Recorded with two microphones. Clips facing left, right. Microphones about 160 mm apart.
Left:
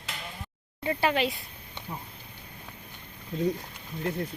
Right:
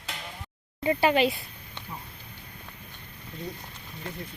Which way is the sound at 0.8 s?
5° right (ahead or behind).